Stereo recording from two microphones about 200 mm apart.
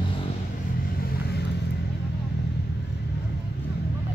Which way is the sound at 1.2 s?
55° left (ahead or behind).